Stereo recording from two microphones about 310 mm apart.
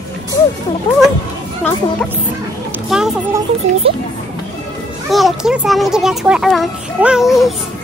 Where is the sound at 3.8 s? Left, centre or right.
Centre.